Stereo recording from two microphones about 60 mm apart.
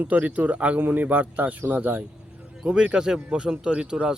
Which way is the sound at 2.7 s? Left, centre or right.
Centre.